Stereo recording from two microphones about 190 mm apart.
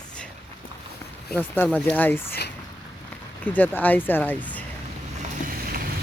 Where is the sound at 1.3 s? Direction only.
10° left (ahead or behind).